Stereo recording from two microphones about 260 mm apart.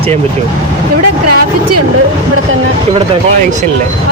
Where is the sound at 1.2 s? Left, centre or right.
Right.